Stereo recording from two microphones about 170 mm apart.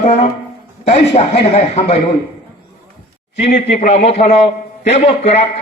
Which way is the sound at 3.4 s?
40° left (ahead or behind).